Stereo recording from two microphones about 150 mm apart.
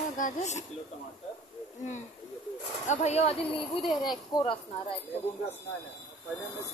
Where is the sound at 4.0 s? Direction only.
25° left (ahead or behind).